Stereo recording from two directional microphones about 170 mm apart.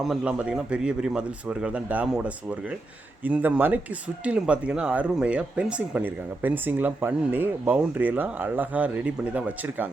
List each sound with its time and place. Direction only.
0.0 s a man's voice: 5° right (ahead or behind)